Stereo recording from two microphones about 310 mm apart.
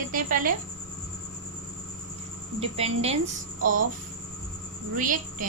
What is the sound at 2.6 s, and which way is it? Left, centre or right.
Speech, centre.